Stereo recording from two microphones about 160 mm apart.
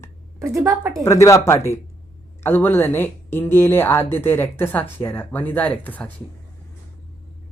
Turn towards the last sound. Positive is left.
turn(degrees=10)  # may be behind; listen again after turning